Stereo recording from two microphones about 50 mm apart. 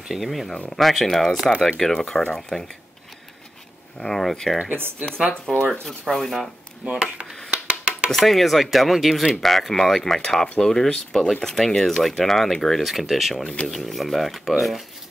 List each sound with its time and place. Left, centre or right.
0.1 s speech: centre
4.0 s speech: centre
4.6 s speech: right
5.5 s speech: centre
6.9 s speech: centre
7.5 s a sound: right
8.3 s speech: centre
13.4 s speech: left
13.7 s speech: centre